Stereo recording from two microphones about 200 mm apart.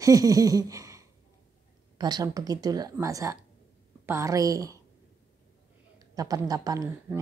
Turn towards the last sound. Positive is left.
turn(degrees=-20)  # may be behind; listen again after turning